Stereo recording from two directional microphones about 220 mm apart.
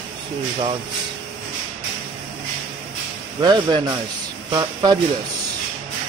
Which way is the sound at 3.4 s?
20° right (ahead or behind).